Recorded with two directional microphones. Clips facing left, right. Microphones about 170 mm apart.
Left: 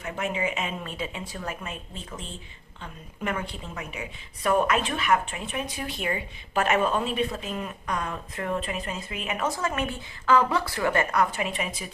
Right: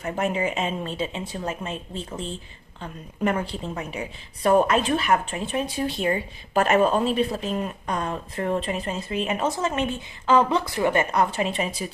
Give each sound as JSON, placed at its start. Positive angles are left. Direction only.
{"t": 0.0, "sound": "a woman's voice", "side_deg": -40}